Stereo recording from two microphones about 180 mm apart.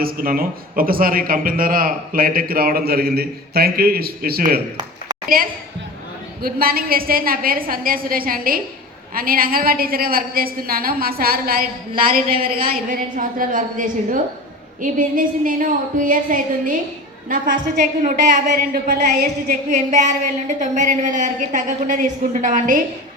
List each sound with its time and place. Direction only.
0.0 s a man's voice: 55° right (ahead or behind)
6.4 s a man's voice: 55° right (ahead or behind)
18.5 s a man's voice: 60° right (ahead or behind)
19.7 s a woman's voice: 40° right (ahead or behind)